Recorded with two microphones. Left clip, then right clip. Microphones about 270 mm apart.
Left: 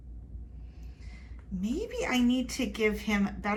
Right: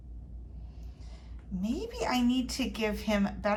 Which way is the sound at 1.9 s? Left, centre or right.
Centre.